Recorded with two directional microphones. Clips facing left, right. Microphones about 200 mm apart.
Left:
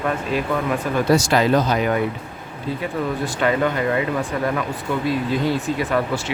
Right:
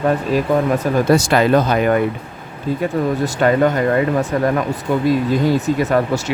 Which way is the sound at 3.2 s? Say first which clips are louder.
Right 5 dB; 45° right (ahead or behind).